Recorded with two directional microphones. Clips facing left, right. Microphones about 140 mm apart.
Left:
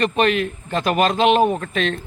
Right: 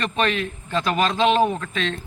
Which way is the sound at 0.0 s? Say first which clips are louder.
Left 5 dB; 45° left (ahead or behind).